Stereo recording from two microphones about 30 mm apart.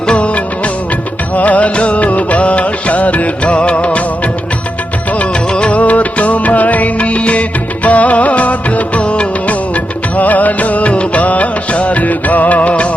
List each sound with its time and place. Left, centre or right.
1.4 s music: left
3.5 s music: left
5.7 s music: left
7.0 s music: left
10.2 s music: left